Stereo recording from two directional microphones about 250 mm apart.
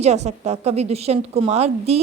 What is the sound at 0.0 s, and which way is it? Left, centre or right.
A woman's voice, right.